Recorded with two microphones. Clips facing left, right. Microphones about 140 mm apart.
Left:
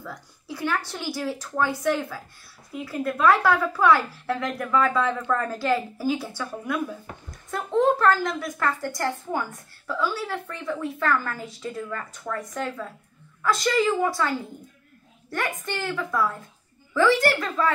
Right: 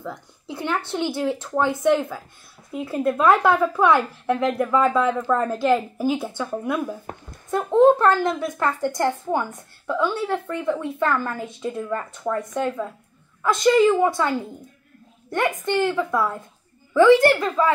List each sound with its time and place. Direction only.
0.0 s a woman's voice: 25° right (ahead or behind)